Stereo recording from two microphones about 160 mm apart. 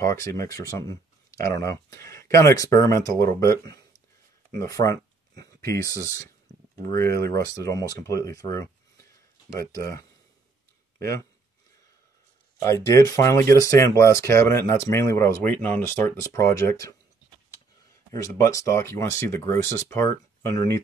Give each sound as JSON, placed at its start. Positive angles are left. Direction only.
{"t": 0.0, "sound": "speech", "side_deg": 20}
{"t": 4.5, "sound": "a sound", "side_deg": 20}
{"t": 5.7, "sound": "speech", "side_deg": 20}
{"t": 7.0, "sound": "speech", "side_deg": -75}
{"t": 7.3, "sound": "speech", "side_deg": 20}
{"t": 11.0, "sound": "speech", "side_deg": 15}
{"t": 12.6, "sound": "speech", "side_deg": 20}
{"t": 18.4, "sound": "speech", "side_deg": 20}